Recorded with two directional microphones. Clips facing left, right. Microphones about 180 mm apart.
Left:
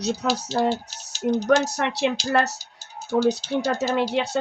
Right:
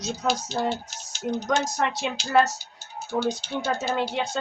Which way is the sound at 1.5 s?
70° left (ahead or behind).